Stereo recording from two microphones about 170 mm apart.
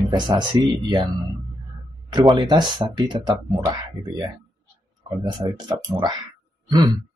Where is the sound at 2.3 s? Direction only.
25° right (ahead or behind).